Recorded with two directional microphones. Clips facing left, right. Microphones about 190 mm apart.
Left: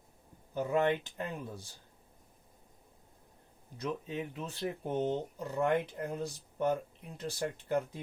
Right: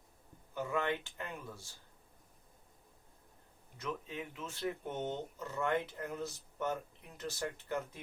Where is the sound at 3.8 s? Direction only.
35° left (ahead or behind).